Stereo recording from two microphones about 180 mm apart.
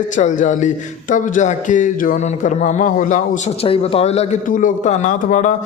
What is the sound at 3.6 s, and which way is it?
A man's voice, 30° left (ahead or behind).